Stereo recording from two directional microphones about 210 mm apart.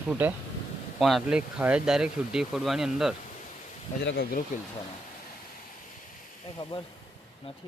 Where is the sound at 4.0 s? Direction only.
55° left (ahead or behind).